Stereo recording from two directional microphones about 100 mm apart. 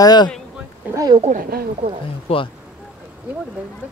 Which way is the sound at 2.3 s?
80° left.